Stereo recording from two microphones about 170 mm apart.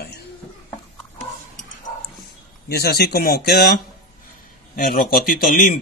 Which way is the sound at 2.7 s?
65° left (ahead or behind).